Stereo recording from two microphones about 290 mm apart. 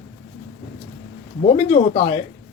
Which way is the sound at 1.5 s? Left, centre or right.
Centre.